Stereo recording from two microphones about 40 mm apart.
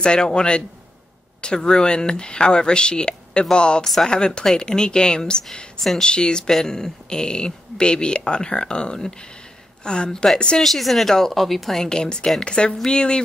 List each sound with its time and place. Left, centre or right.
0.0 s speech: left
3.8 s speech: centre
4.6 s speech: left
10.6 s a woman's voice: centre
11.9 s speech: centre